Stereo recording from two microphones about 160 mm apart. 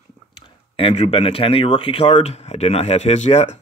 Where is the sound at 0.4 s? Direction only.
35° left (ahead or behind).